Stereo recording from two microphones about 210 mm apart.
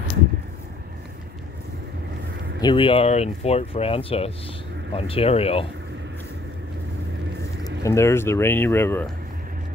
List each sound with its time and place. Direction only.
2.6 s speech: 25° left (ahead or behind)
7.8 s speech: 10° left (ahead or behind)